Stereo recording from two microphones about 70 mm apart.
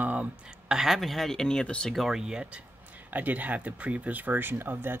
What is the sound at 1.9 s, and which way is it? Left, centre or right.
Speech, centre.